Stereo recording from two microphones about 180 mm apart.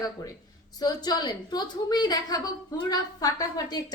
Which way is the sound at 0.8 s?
20° left (ahead or behind).